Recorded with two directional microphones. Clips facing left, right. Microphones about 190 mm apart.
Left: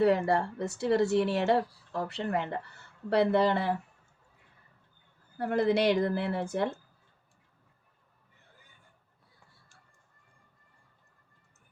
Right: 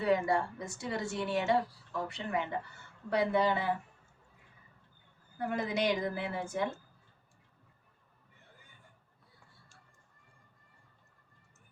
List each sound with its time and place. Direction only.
0.0 s speech: 65° left (ahead or behind)
5.4 s speech: 65° left (ahead or behind)